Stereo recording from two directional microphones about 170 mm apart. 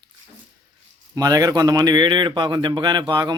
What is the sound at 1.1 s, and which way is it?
Speech, 20° right (ahead or behind).